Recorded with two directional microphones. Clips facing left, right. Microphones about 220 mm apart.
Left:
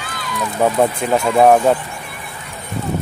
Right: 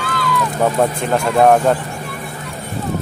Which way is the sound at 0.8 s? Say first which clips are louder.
Left 1 dB; centre (ahead or behind).